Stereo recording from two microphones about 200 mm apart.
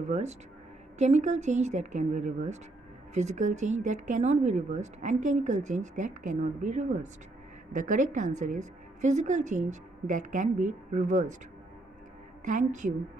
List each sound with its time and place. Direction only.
0.1 s speech: 35° right (ahead or behind)
12.4 s speech: 40° right (ahead or behind)